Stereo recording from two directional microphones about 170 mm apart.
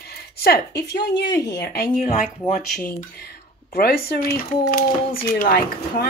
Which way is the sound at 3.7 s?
65° left (ahead or behind).